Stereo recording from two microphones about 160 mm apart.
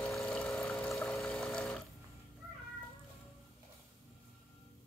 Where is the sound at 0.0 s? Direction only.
Centre (ahead or behind).